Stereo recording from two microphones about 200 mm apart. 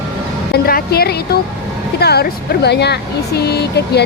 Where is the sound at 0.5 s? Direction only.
50° left (ahead or behind).